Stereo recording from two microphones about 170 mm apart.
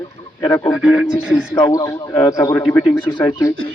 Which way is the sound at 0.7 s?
5° right (ahead or behind).